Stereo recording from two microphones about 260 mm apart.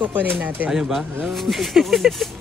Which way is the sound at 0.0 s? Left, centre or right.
Centre.